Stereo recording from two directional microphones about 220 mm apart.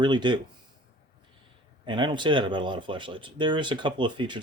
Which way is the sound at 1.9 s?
20° right (ahead or behind).